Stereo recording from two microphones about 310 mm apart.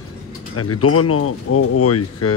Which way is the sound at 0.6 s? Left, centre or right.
Left.